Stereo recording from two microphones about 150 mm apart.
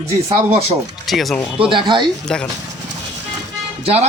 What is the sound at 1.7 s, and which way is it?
Speech, 30° right (ahead or behind).